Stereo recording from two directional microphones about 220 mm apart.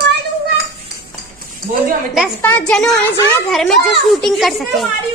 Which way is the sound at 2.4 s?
5° left (ahead or behind).